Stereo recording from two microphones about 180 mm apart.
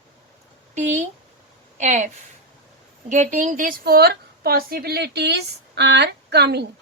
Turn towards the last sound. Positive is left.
turn(degrees=-65)  # may be behind; listen again after turning